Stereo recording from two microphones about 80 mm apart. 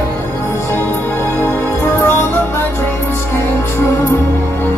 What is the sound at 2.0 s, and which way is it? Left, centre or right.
Music, left.